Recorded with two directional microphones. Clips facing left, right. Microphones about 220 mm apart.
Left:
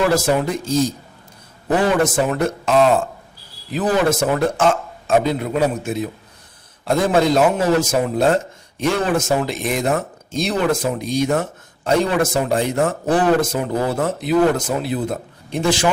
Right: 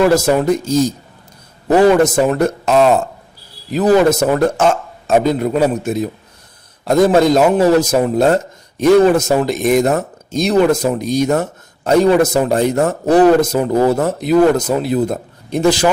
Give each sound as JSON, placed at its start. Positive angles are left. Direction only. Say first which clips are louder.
{"t": 0.1, "sound": "speech", "louder": "right 5 dB", "side_deg": -40}